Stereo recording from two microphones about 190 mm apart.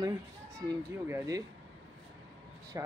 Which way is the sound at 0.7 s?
15° right (ahead or behind).